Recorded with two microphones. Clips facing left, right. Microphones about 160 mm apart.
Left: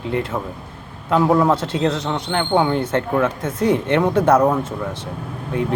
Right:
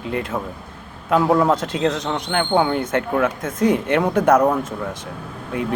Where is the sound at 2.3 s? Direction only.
20° left (ahead or behind).